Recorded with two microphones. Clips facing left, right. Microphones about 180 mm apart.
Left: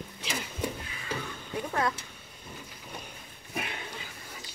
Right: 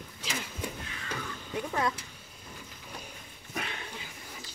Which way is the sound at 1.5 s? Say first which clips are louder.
Left 1 dB; 10° right (ahead or behind).